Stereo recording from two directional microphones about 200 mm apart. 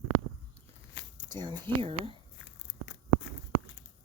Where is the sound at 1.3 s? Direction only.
20° right (ahead or behind).